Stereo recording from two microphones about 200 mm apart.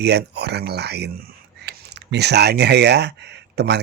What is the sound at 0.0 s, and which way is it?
Speech, 55° right (ahead or behind).